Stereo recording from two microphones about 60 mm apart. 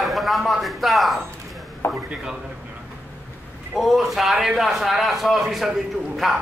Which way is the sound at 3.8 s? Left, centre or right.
Centre.